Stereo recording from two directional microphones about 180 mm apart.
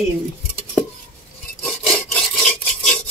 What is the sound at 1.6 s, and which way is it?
Rub, 5° left (ahead or behind).